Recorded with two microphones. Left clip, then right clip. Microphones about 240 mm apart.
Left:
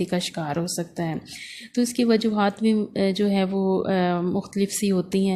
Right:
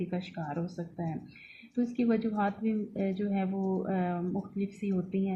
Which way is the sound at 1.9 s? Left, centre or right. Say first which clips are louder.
Left 9 dB; left.